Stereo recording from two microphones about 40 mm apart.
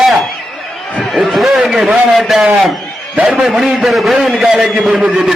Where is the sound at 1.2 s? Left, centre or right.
Centre.